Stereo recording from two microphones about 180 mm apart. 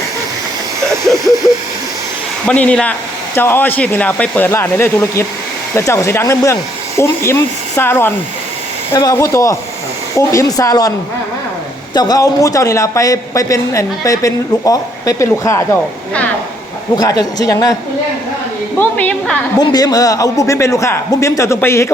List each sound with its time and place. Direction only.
2.5 s a man's voice: 5° left (ahead or behind)
11.9 s speech: 20° left (ahead or behind)
16.9 s speech: 20° left (ahead or behind)
18.8 s a man's voice: 10° left (ahead or behind)
19.5 s a man's voice: 20° left (ahead or behind)